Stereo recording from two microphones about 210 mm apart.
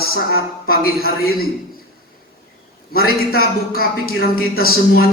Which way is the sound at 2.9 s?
45° left (ahead or behind).